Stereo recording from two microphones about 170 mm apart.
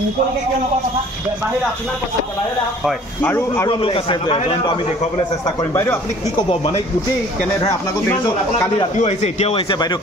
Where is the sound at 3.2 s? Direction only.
15° left (ahead or behind).